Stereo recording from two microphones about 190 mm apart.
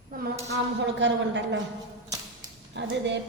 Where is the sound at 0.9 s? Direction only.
70° right (ahead or behind).